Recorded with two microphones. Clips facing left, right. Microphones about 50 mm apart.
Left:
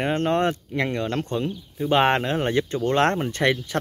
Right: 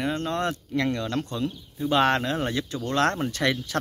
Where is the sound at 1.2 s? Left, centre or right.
Left.